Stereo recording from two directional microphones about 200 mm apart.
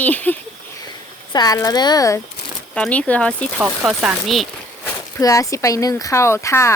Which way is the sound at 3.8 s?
5° right (ahead or behind).